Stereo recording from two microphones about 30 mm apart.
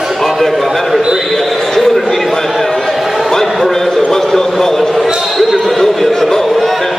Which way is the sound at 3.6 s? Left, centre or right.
Centre.